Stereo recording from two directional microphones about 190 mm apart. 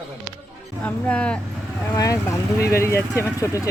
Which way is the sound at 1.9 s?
15° left (ahead or behind).